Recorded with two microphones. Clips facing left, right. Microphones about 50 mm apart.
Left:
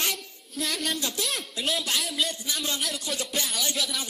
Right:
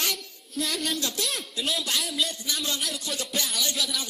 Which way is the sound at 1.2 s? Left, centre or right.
Centre.